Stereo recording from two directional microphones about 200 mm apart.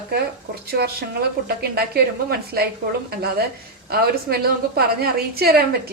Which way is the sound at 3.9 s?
50° right (ahead or behind).